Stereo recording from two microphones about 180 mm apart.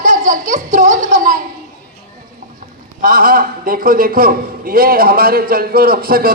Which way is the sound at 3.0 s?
55° right (ahead or behind).